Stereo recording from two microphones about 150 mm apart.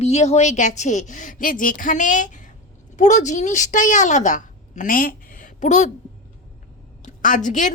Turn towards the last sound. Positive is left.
turn(degrees=55)  # may be behind; listen again after turning